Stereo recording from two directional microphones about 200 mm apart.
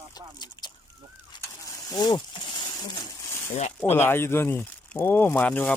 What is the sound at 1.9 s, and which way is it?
Speech, 20° left (ahead or behind).